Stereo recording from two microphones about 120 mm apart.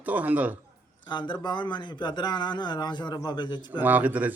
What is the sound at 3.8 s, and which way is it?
Speech, 15° right (ahead or behind).